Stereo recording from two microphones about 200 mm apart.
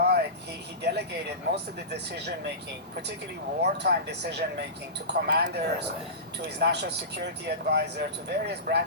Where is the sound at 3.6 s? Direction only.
55° right (ahead or behind).